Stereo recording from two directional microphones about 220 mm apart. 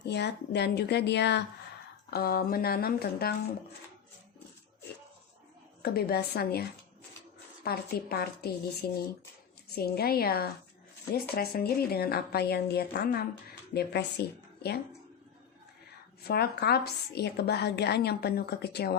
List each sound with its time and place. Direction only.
0.0 s a woman's voice: 50° left (ahead or behind)
5.8 s a woman's voice: 45° left (ahead or behind)
9.7 s a woman's voice: 45° left (ahead or behind)
16.2 s a woman's voice: 45° left (ahead or behind)